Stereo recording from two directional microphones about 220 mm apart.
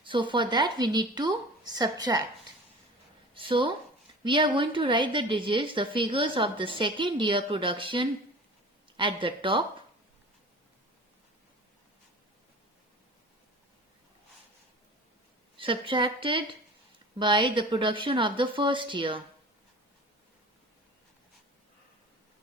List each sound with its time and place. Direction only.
0.0 s speech: 20° right (ahead or behind)
3.3 s speech: 25° right (ahead or behind)
15.5 s speech: 25° right (ahead or behind)